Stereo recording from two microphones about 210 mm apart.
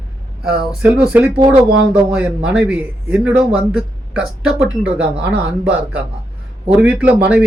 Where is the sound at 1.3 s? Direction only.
25° right (ahead or behind).